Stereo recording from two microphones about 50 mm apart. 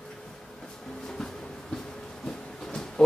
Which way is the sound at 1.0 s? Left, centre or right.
Centre.